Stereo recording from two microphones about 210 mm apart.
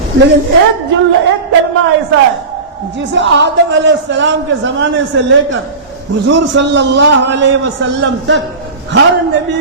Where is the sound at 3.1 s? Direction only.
60° right (ahead or behind).